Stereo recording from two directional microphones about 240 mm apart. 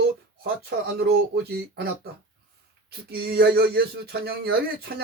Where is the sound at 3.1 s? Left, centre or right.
Right.